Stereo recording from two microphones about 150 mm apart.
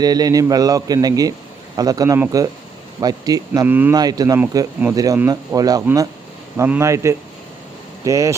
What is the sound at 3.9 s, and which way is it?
A man's voice, 25° right (ahead or behind).